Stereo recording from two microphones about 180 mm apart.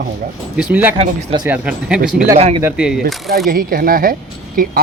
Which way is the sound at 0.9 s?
25° right (ahead or behind).